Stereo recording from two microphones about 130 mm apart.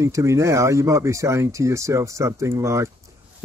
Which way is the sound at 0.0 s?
25° right (ahead or behind).